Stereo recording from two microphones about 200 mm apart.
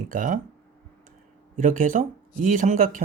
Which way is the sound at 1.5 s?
40° right (ahead or behind).